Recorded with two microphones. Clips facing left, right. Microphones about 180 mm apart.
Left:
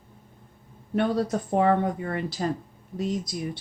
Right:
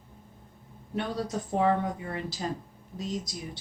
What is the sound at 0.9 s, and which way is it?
Speech, 55° left (ahead or behind).